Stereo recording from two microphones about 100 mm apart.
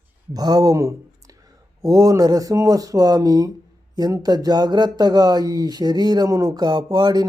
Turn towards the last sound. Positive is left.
turn(degrees=-45)  # may be behind; listen again after turning